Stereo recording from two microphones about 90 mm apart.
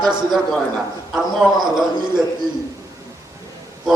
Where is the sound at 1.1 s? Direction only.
5° right (ahead or behind).